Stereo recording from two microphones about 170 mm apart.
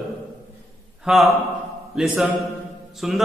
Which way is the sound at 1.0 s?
Centre (ahead or behind).